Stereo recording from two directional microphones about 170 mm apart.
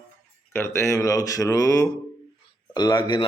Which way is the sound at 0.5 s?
15° left (ahead or behind).